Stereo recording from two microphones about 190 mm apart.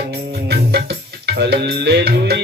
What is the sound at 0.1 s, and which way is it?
Music, 60° right (ahead or behind).